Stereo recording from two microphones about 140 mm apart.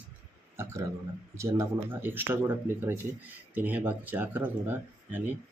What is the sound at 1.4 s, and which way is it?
Speech, 15° right (ahead or behind).